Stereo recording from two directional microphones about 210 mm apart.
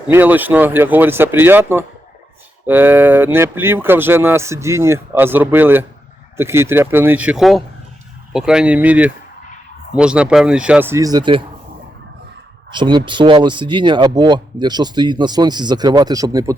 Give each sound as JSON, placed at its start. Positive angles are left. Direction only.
{"t": 0.1, "sound": "speech", "side_deg": -10}
{"t": 12.7, "sound": "speech", "side_deg": -20}